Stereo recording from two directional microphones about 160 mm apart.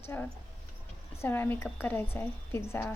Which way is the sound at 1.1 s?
15° left (ahead or behind).